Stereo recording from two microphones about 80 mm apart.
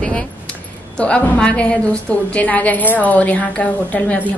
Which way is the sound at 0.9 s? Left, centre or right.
Centre.